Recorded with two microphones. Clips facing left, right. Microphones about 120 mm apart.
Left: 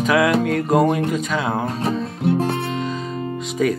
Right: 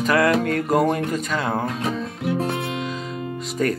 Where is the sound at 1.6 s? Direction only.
30° left (ahead or behind).